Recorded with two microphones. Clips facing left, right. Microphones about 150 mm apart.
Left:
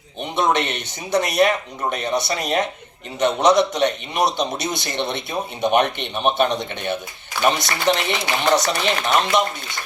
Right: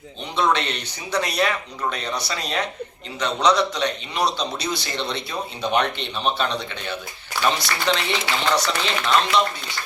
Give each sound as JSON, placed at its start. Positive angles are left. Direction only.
{"t": 0.3, "sound": "a man's voice", "side_deg": 20}